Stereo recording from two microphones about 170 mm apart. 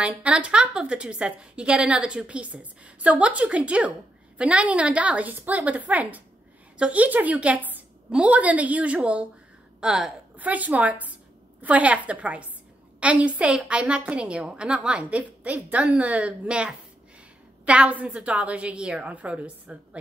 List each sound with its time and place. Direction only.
0.0 s a woman's voice: 5° right (ahead or behind)